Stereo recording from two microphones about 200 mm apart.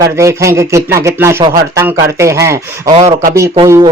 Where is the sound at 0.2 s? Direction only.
15° right (ahead or behind).